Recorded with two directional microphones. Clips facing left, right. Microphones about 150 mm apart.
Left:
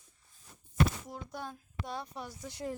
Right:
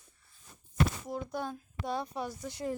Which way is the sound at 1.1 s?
80° right.